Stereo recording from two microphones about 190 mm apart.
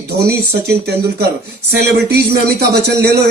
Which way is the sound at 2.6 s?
60° right (ahead or behind).